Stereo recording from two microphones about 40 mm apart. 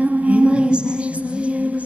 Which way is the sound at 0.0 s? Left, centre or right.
Right.